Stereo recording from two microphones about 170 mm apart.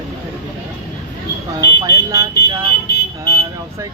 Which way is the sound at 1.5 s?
20° right (ahead or behind).